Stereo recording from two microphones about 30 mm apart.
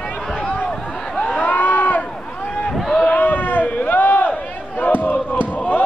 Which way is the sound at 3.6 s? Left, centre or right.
Left.